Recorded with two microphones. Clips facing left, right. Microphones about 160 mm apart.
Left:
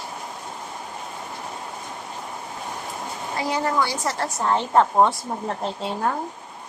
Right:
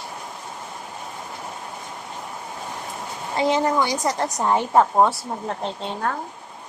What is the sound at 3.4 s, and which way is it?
A woman's voice, 20° right (ahead or behind).